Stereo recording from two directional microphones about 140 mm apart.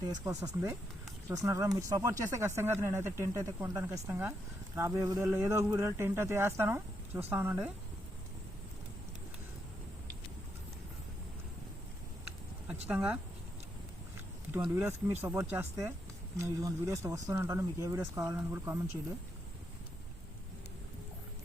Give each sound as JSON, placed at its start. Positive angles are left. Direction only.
{"t": 0.0, "sound": "speech", "side_deg": -30}
{"t": 12.9, "sound": "speech", "side_deg": -10}
{"t": 14.8, "sound": "speech", "side_deg": -15}